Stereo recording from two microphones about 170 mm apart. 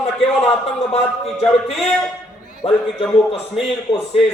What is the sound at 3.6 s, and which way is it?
Speech, centre (ahead or behind).